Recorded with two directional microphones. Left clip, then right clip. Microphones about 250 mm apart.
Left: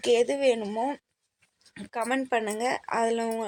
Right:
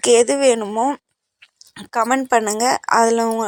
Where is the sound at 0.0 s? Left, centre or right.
Right.